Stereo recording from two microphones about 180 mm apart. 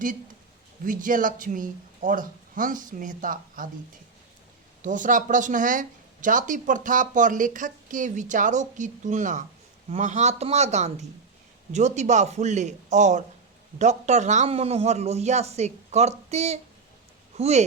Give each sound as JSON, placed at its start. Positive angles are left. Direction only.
{"t": 0.9, "sound": "speech", "side_deg": -50}
{"t": 4.8, "sound": "a man's voice", "side_deg": -45}